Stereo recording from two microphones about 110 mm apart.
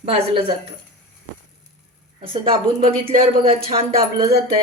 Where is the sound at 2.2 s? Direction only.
55° right (ahead or behind).